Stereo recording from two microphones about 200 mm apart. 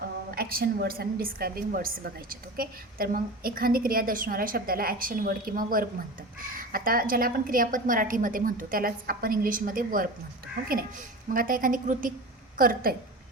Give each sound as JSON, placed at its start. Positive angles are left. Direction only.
{"t": 0.3, "sound": "a woman's voice", "side_deg": -50}
{"t": 11.3, "sound": "a woman's voice", "side_deg": -45}